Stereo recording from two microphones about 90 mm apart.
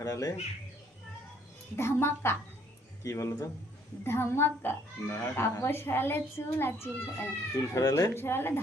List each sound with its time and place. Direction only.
0.0 s speech: 40° left (ahead or behind)
1.7 s speech: 30° left (ahead or behind)